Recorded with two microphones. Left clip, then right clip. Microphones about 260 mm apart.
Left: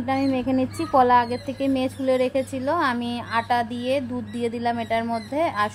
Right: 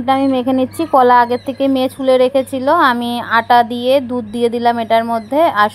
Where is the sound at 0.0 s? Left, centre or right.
Right.